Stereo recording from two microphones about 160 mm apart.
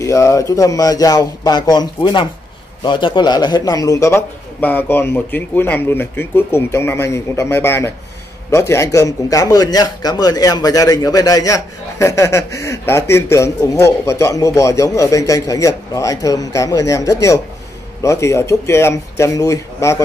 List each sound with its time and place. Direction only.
0.0 s a man's voice: 20° left (ahead or behind)